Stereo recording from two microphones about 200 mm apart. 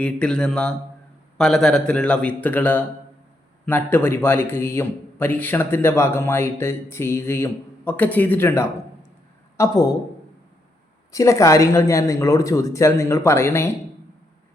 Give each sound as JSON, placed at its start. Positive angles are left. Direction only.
{"t": 0.0, "sound": "a man's voice", "side_deg": 5}
{"t": 11.1, "sound": "a man's voice", "side_deg": 15}